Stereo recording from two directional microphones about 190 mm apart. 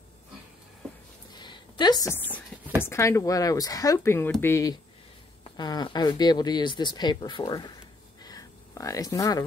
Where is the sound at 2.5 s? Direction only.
5° left (ahead or behind).